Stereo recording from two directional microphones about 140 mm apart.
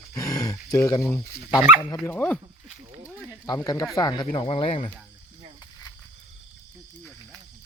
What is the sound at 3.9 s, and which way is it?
Speech, 30° left (ahead or behind).